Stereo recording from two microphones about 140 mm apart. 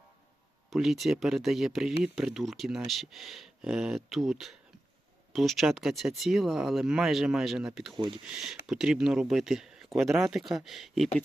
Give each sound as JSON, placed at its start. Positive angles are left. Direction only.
{"t": 0.7, "sound": "speech", "side_deg": 0}
{"t": 7.9, "sound": "speech", "side_deg": -35}
{"t": 8.3, "sound": "speech", "side_deg": -5}